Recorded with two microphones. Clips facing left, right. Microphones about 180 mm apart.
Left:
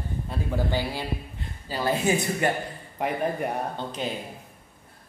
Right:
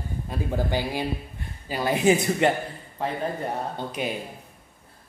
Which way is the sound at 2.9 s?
15° left (ahead or behind).